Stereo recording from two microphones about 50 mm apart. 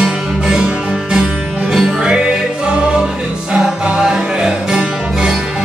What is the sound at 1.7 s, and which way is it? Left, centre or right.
Music, centre.